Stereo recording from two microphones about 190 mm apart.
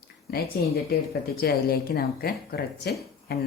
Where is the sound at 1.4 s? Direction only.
55° left (ahead or behind).